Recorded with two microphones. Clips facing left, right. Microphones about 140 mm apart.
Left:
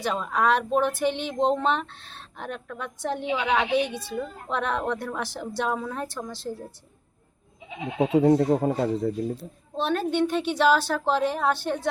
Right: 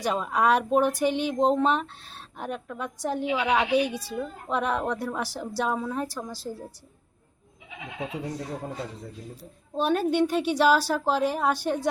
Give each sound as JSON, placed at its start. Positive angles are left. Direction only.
{"t": 0.0, "sound": "speech", "side_deg": -10}
{"t": 8.1, "sound": "speech", "side_deg": 70}
{"t": 9.4, "sound": "speech", "side_deg": -10}